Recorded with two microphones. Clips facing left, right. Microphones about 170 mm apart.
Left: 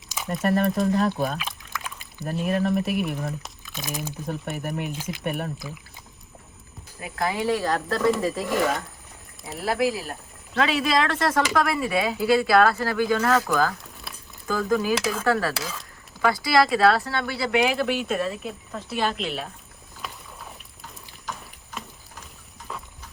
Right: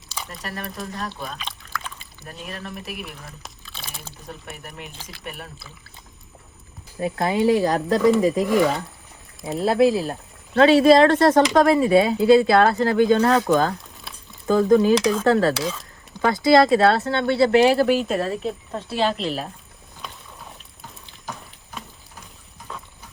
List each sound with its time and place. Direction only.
0.3 s speech: 50° left (ahead or behind)
2.5 s speech: 50° left (ahead or behind)
4.6 s speech: 45° left (ahead or behind)
7.0 s speech: 25° right (ahead or behind)
8.4 s speech: centre (ahead or behind)
9.6 s speech: 25° right (ahead or behind)
14.9 s speech: 5° left (ahead or behind)
15.2 s speech: 25° right (ahead or behind)
15.5 s speech: 5° left (ahead or behind)
16.2 s speech: 25° right (ahead or behind)
20.0 s rowboat: 5° left (ahead or behind)